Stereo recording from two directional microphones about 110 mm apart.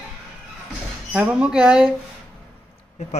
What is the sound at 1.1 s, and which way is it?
Speech, 10° right (ahead or behind).